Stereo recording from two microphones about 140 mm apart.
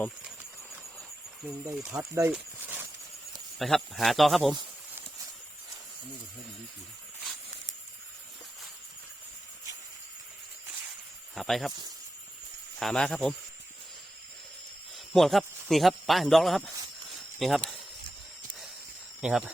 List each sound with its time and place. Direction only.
1.5 s speech: 10° right (ahead or behind)
1.9 s speech: 20° right (ahead or behind)
2.3 s a sound: 10° right (ahead or behind)
3.6 s speech: centre (ahead or behind)
11.3 s speech: centre (ahead or behind)
12.8 s speech: 5° left (ahead or behind)
14.9 s speech: centre (ahead or behind)
19.2 s speech: 5° right (ahead or behind)